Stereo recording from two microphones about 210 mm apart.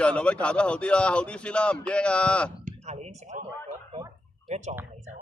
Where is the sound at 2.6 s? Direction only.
35° right (ahead or behind).